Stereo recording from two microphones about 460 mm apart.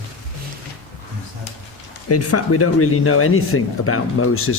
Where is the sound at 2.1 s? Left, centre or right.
Left.